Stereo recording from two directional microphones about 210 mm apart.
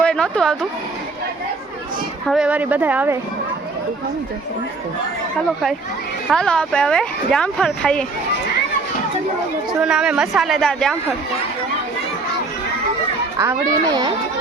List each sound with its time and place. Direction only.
0.0 s speech: 5° left (ahead or behind)
2.2 s speech: 5° right (ahead or behind)
6.3 s speech: 5° left (ahead or behind)
9.8 s speech: 5° right (ahead or behind)
13.4 s speech: 15° right (ahead or behind)